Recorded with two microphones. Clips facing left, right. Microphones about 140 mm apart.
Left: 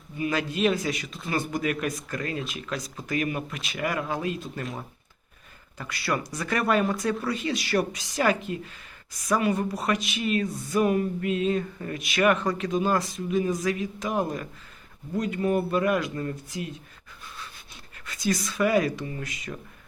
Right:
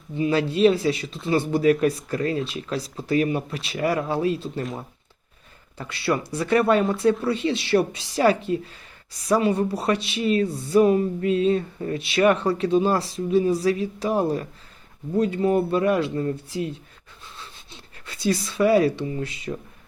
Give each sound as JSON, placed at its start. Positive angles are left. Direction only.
{"t": 0.2, "sound": "speech", "side_deg": -30}
{"t": 5.7, "sound": "speech", "side_deg": -25}
{"t": 18.0, "sound": "speech", "side_deg": -30}